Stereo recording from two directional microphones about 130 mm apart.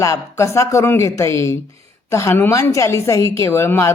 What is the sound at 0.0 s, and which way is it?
A woman's voice, 25° left (ahead or behind).